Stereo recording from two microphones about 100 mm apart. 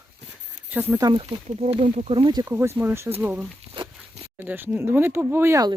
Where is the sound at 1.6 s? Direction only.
90° right; by 2.4 s 50° right (ahead or behind).